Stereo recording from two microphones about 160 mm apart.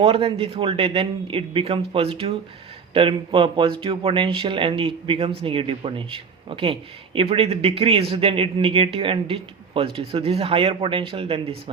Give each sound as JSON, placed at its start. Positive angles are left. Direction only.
{"t": 0.0, "sound": "speech", "side_deg": -35}